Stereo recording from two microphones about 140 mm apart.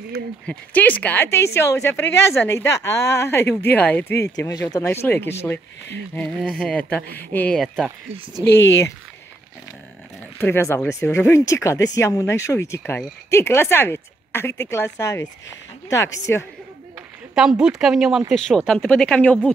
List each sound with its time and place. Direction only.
0.5 s a woman's voice: 10° left (ahead or behind)
8.5 s speech: 20° left (ahead or behind)
10.4 s a woman's voice: 15° left (ahead or behind)
17.4 s speech: 5° right (ahead or behind)